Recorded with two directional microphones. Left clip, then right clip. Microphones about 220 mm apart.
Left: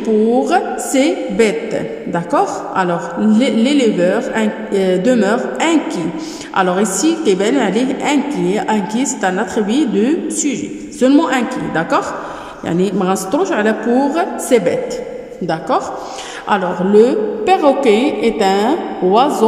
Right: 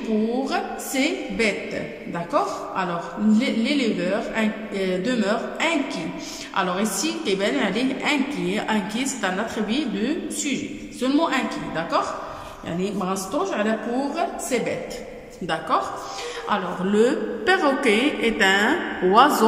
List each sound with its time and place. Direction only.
0.4 s a woman's voice: 35° left (ahead or behind)
16.9 s a woman's voice: 20° left (ahead or behind)